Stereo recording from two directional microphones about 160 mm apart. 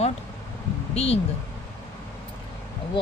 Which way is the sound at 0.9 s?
40° left (ahead or behind).